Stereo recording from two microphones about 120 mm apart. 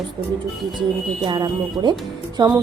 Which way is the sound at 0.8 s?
40° right (ahead or behind).